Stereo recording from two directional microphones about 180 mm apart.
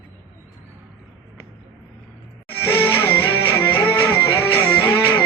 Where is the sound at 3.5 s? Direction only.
10° left (ahead or behind).